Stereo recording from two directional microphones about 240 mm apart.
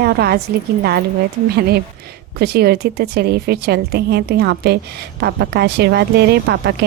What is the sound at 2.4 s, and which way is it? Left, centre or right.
A woman's voice, right.